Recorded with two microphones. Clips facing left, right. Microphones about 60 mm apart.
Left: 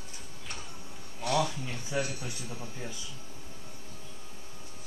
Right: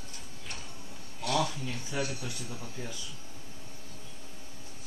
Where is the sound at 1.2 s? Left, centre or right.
Left.